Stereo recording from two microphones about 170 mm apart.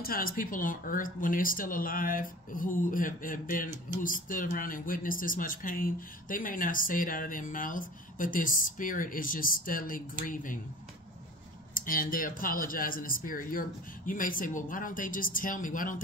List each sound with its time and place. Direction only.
0.0 s speech: 60° left (ahead or behind)
11.7 s speech: 55° left (ahead or behind)